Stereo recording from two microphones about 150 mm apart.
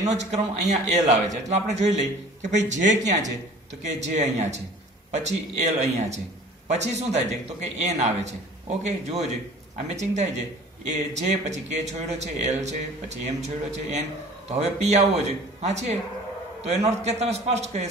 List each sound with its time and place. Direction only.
0.0 s a man's voice: 50° right (ahead or behind)
9.8 s a man's voice: 50° right (ahead or behind)